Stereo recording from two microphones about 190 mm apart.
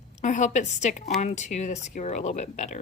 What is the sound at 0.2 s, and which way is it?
Speech, 40° left (ahead or behind).